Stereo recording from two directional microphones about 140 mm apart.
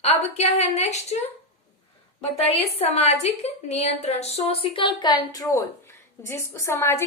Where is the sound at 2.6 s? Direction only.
45° left (ahead or behind).